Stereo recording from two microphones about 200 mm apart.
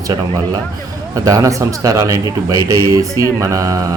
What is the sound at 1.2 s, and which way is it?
A man's voice, 15° right (ahead or behind).